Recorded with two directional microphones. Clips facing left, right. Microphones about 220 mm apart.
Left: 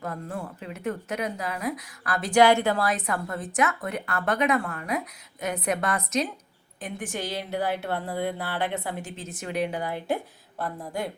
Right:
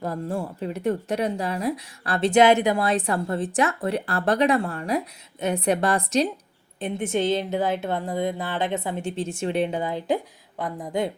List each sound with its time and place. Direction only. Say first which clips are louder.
0.0 s speech: right 6 dB; 35° right (ahead or behind); by 2.9 s 15° right (ahead or behind)
2.9 s a woman's voice: right 5 dB; 30° right (ahead or behind)